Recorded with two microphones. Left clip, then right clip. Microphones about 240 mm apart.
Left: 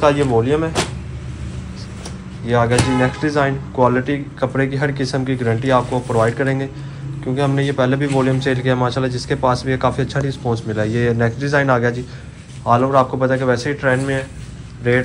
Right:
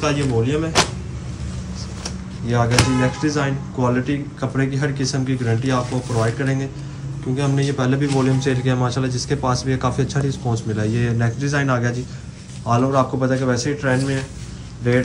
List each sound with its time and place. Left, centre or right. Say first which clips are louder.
0.0 s speech: left 6 dB; centre
2.4 s speech: left 3 dB; centre
6.0 s speech: left 5 dB; centre